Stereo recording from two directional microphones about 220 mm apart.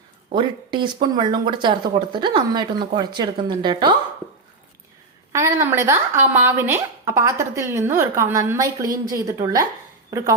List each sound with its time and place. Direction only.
0.3 s speech: 20° right (ahead or behind)
5.3 s a woman's voice: 15° right (ahead or behind)